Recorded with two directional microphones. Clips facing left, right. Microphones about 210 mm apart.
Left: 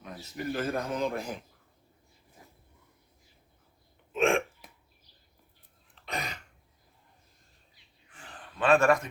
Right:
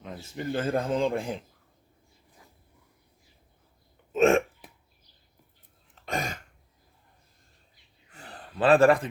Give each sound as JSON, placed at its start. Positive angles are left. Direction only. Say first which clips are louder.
{"t": 0.3, "sound": "speech", "louder": "right 3 dB", "side_deg": -30}
{"t": 4.1, "sound": "hiccup", "louder": "right 5 dB", "side_deg": -40}
{"t": 5.9, "sound": "throat clearing", "louder": "right 5 dB", "side_deg": -45}
{"t": 8.1, "sound": "a sound", "louder": "right 5 dB", "side_deg": -40}